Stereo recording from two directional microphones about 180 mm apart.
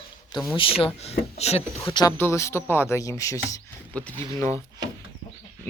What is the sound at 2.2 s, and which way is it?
Speech, 15° left (ahead or behind).